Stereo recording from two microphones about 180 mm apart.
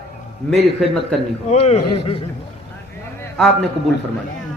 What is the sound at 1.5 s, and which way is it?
Speech, 35° left (ahead or behind).